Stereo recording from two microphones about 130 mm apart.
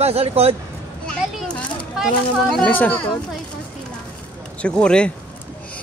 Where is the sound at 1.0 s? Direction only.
10° left (ahead or behind).